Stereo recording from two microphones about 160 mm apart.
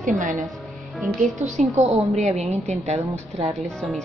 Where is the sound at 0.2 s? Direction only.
50° right (ahead or behind).